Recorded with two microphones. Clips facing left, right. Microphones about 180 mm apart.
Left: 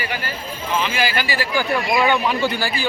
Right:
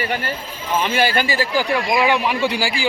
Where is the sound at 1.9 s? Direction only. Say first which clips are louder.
Even; 5° right (ahead or behind).